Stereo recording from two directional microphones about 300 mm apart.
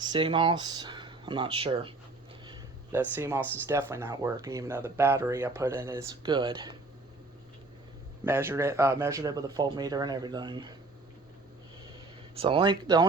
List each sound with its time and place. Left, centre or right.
0.1 s speech: centre
2.5 s a sound: centre
3.7 s speech: centre
8.2 s speech: centre
12.3 s speech: centre